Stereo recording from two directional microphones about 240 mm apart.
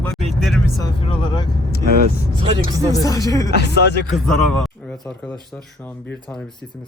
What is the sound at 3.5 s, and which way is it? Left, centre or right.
Speech, left.